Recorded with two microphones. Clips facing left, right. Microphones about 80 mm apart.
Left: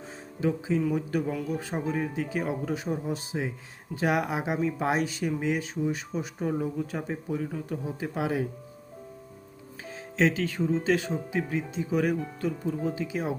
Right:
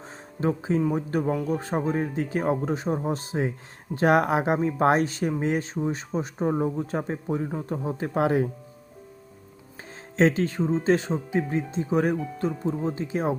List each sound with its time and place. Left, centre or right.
0.3 s speech: right
0.8 s speech: right
10.2 s speech: right
13.0 s speech: right